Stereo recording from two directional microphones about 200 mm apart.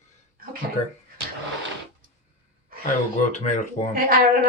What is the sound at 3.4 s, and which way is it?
Speech, 40° left (ahead or behind).